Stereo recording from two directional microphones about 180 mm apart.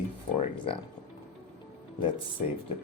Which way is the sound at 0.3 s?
30° left (ahead or behind).